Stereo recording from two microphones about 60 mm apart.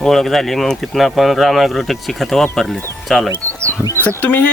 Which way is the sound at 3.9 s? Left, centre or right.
Left.